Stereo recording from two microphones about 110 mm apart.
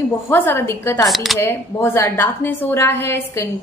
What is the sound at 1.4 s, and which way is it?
A woman's voice, 20° left (ahead or behind).